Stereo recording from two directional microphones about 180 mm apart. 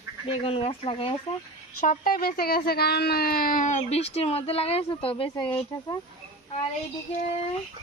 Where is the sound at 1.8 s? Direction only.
50° left (ahead or behind); by 5.5 s 30° left (ahead or behind).